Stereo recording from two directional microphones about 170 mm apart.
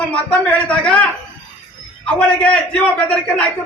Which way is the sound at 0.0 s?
10° left (ahead or behind).